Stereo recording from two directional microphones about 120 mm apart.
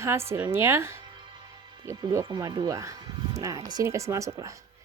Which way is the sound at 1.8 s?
35° right (ahead or behind).